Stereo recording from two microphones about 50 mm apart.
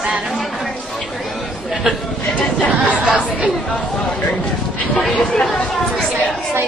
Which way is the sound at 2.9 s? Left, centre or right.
Right.